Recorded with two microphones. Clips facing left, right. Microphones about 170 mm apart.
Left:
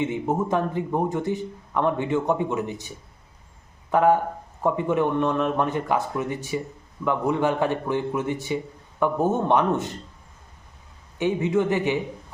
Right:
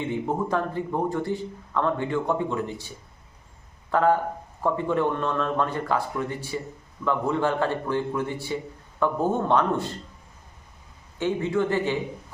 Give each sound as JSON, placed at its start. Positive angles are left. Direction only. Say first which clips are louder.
{"t": 0.0, "sound": "a man's voice", "louder": "left 2 dB", "side_deg": 20}
{"t": 3.9, "sound": "a man's voice", "louder": "left 2 dB", "side_deg": 15}
{"t": 11.2, "sound": "a man's voice", "louder": "left 2 dB", "side_deg": 15}